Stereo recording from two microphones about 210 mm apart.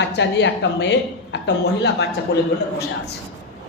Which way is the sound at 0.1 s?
55° left (ahead or behind).